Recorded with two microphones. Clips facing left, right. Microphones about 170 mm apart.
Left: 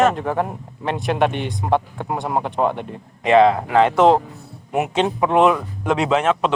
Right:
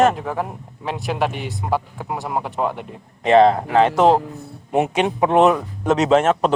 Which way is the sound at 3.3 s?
35° right (ahead or behind).